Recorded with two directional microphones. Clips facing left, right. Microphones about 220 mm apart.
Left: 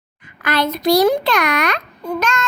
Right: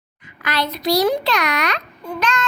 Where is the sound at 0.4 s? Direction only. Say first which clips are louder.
Left 4 dB; 50° left (ahead or behind).